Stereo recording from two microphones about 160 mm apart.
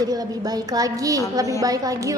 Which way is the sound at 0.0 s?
25° right (ahead or behind).